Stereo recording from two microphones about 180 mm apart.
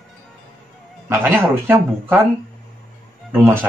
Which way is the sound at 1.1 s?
15° right (ahead or behind).